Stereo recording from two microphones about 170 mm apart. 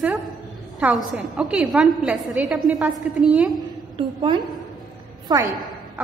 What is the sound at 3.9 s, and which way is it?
A woman's voice, 30° right (ahead or behind).